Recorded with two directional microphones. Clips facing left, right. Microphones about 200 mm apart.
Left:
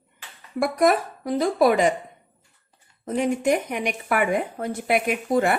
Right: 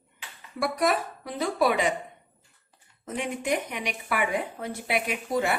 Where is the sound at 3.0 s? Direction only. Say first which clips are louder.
Left 9 dB; 40° left (ahead or behind).